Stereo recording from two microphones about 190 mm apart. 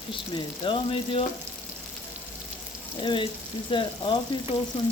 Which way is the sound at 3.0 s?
25° left (ahead or behind).